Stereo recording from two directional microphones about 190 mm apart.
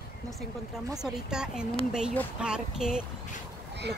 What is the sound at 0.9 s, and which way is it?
Speech, 5° right (ahead or behind).